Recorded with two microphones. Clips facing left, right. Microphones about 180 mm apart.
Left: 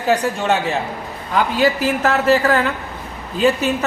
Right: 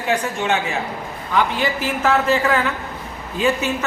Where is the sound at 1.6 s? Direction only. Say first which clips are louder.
Left 4 dB; 40° left (ahead or behind).